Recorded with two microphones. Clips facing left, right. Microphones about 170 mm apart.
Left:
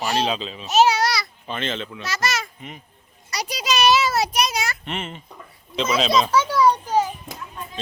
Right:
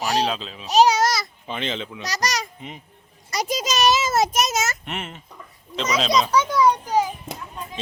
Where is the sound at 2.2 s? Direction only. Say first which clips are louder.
Even; 40° right (ahead or behind).